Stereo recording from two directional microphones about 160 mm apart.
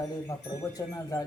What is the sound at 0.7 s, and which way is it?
Speech, 20° left (ahead or behind).